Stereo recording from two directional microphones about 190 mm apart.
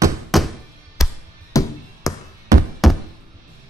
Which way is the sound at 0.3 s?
Centre (ahead or behind).